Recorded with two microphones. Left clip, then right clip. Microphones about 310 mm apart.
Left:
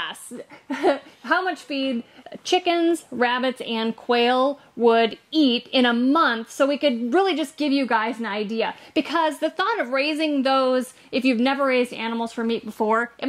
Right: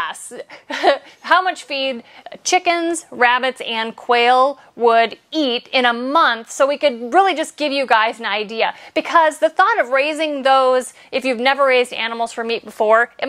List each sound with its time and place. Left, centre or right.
0.7 s a woman's voice: right